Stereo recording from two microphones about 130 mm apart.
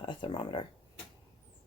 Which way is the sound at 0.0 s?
40° left (ahead or behind).